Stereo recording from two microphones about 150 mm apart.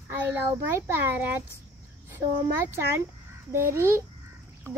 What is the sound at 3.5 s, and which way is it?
Speech, 20° right (ahead or behind).